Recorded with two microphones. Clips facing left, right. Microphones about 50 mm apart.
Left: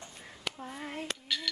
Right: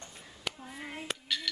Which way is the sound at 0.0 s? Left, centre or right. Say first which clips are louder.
Even; centre.